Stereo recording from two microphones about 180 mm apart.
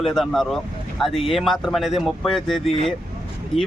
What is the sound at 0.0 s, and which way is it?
Speech, centre (ahead or behind).